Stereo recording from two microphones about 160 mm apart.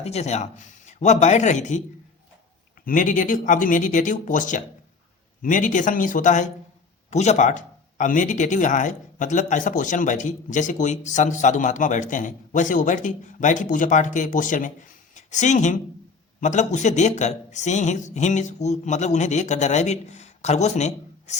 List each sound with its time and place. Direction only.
0.0 s speech: 40° left (ahead or behind)
2.8 s speech: 55° left (ahead or behind)